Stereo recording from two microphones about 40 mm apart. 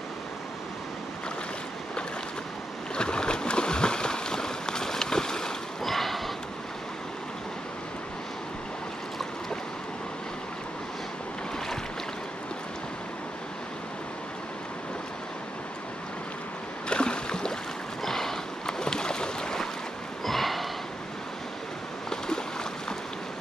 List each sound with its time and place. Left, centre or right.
3.0 s boat: left
5.9 s a sound: centre
16.9 s boat: left
20.2 s sniff: centre